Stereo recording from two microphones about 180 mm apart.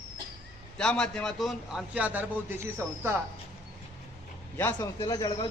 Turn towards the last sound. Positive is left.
turn(degrees=20)  # may be behind; listen again after turning